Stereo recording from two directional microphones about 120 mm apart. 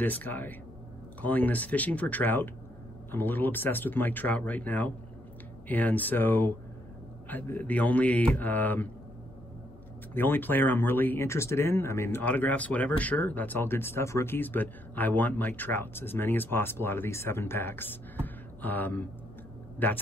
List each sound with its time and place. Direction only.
0.0 s speech: 15° left (ahead or behind)
10.1 s speech: 15° left (ahead or behind)